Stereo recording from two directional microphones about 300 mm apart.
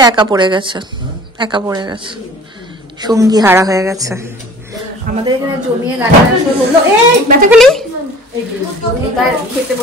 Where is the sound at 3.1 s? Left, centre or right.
Centre.